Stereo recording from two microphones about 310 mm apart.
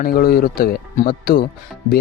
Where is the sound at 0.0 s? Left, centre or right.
Left.